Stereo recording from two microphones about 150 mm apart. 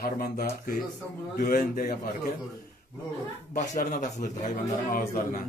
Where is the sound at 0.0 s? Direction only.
80° left.